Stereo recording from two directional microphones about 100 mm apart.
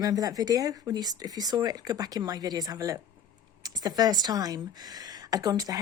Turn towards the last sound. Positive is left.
turn(degrees=-40)  # may be behind; listen again after turning